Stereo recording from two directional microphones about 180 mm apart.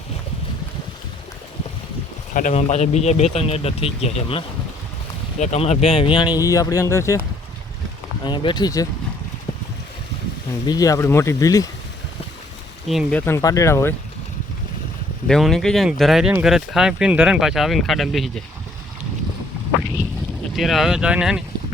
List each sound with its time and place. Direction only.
2.3 s speech: 45° left (ahead or behind); by 7.2 s 15° left (ahead or behind)
8.2 s speech: 25° left (ahead or behind)
10.7 s speech: 20° left (ahead or behind)
12.9 s speech: 5° left (ahead or behind)
15.3 s speech: centre (ahead or behind)
20.6 s speech: centre (ahead or behind)